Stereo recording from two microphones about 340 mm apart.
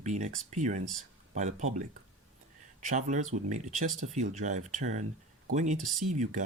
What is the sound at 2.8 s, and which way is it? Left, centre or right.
Speech, right.